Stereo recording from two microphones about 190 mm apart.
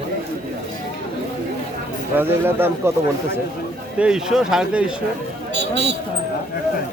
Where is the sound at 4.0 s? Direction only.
5° right (ahead or behind).